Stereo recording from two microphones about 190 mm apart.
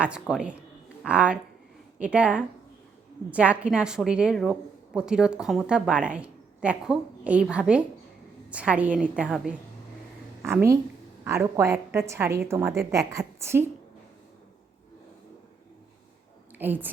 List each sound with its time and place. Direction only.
0.0 s a woman's voice: 5° right (ahead or behind)
11.2 s a woman's voice: 15° right (ahead or behind)
16.6 s a woman's voice: 10° right (ahead or behind)